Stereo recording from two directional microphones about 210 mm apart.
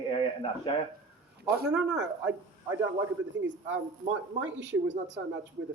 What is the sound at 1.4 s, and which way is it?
Speech, 50° right (ahead or behind).